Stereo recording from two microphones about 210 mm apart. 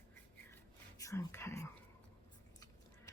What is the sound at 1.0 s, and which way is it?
Whispering, 15° left (ahead or behind).